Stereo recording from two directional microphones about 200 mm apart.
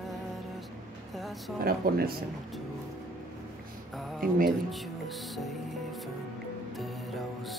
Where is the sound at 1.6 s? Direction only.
50° right (ahead or behind).